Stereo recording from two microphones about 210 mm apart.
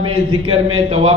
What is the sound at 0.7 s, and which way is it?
Speech, 25° right (ahead or behind).